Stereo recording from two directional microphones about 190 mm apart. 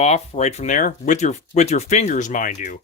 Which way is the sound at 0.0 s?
35° left (ahead or behind).